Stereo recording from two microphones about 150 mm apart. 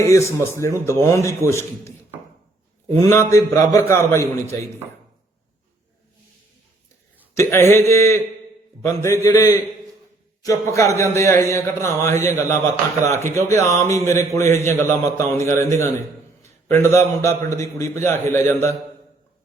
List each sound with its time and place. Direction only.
0.0 s a man's voice: 20° left (ahead or behind)
2.9 s a man's voice: 20° left (ahead or behind)
7.3 s a man's voice: 20° left (ahead or behind)